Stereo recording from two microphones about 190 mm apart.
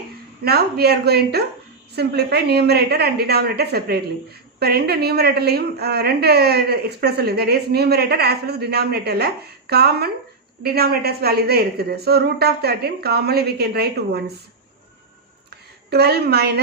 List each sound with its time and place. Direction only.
0.4 s a woman's voice: 55° right (ahead or behind)
15.9 s a woman's voice: 60° right (ahead or behind)